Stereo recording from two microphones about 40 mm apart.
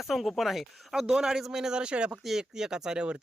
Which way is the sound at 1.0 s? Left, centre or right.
Centre.